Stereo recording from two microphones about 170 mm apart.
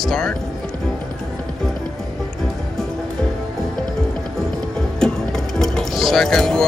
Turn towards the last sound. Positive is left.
turn(degrees=5)  # may be behind; listen again after turning